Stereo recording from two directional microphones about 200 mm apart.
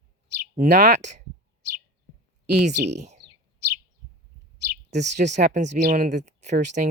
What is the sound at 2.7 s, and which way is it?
Speech, 60° right (ahead or behind).